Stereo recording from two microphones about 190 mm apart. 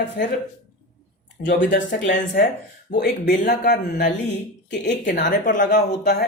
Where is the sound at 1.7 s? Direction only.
70° left (ahead or behind).